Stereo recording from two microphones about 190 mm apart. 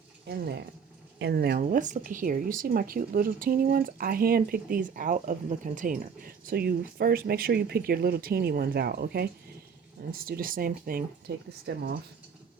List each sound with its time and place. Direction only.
0.3 s speech: 60° right (ahead or behind)
11.6 s speech: 65° right (ahead or behind)